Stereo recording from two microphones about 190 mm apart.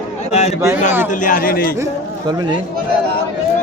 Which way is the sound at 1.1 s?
45° left (ahead or behind).